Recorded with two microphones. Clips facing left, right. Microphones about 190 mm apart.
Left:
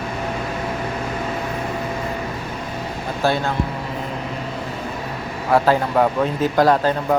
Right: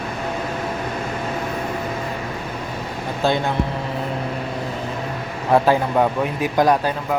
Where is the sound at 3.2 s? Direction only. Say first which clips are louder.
Even; 15° right (ahead or behind).